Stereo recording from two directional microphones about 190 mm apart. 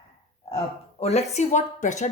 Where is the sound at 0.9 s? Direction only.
35° left (ahead or behind).